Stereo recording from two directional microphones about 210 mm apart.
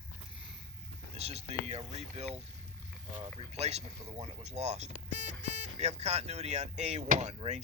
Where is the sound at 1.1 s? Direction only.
30° right (ahead or behind).